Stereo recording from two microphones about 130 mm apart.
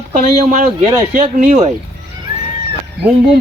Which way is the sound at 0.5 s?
75° right (ahead or behind).